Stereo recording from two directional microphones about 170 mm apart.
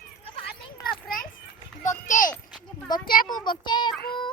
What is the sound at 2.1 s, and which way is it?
Speech, 50° left (ahead or behind).